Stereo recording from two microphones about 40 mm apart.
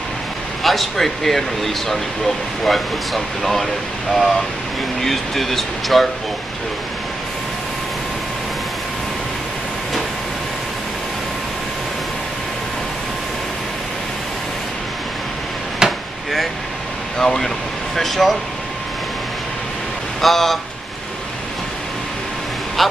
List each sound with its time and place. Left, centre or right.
0.7 s speech: centre
15.8 s chop: centre
17.2 s speech: centre
20.2 s speech: centre
22.8 s speech: centre